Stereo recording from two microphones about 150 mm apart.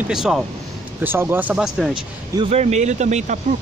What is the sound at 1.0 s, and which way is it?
Speech, 15° right (ahead or behind).